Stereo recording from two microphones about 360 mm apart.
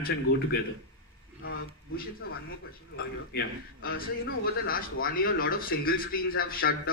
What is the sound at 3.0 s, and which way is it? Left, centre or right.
A man's voice, left.